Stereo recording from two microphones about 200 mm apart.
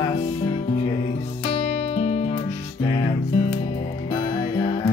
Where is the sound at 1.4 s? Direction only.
35° left (ahead or behind).